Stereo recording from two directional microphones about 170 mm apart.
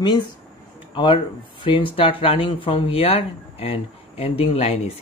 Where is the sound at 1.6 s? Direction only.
30° left (ahead or behind).